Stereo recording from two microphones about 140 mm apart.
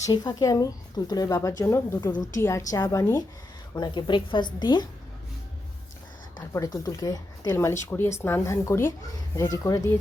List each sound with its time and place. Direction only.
0.0 s a woman's voice: 25° left (ahead or behind)
6.5 s speech: 25° left (ahead or behind)